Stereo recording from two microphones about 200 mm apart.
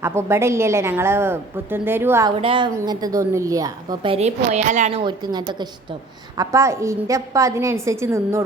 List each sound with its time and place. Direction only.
0.0 s a woman's voice: 15° right (ahead or behind)
2.3 s a woman's voice: 25° right (ahead or behind)